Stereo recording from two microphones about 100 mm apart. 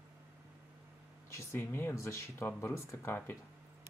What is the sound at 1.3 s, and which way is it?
Speech, 25° left (ahead or behind).